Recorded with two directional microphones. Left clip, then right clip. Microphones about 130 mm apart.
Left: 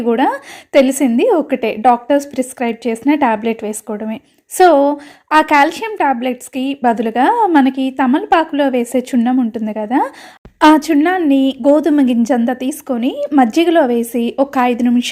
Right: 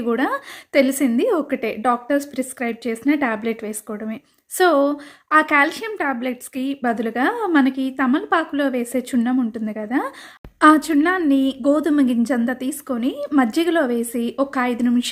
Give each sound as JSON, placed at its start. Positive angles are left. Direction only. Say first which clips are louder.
{"t": 0.0, "sound": "a woman's voice", "louder": "left 7 dB", "side_deg": 20}